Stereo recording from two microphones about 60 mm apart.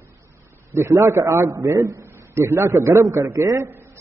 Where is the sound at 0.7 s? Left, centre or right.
Right.